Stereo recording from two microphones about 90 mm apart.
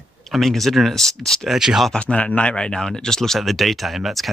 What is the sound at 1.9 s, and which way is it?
Speech, 15° left (ahead or behind).